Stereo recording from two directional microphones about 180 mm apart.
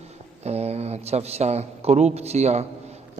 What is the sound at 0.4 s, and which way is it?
A man's voice, 35° right (ahead or behind).